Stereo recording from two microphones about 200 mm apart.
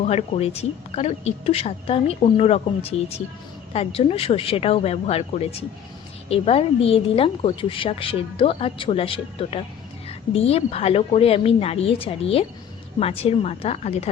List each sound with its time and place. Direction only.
0.0 s a woman's voice: 30° left (ahead or behind)